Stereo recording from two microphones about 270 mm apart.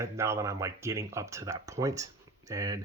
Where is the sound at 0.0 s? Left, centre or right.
Centre.